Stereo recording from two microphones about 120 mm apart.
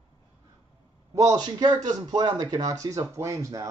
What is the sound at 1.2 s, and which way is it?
A man's voice, 30° right (ahead or behind).